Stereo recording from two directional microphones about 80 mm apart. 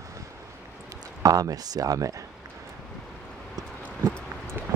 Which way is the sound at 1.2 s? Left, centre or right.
Right.